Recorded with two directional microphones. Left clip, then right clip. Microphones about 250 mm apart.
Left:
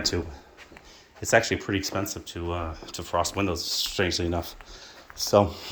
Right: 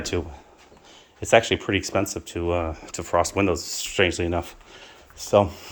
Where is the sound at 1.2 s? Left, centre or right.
Centre.